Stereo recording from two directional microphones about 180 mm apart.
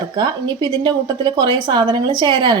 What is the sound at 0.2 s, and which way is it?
A woman's voice, 25° right (ahead or behind).